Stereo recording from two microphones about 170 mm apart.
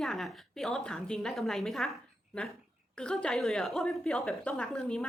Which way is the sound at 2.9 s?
5° left (ahead or behind).